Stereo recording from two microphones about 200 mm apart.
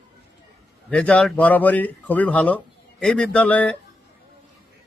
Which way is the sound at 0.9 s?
5° left (ahead or behind).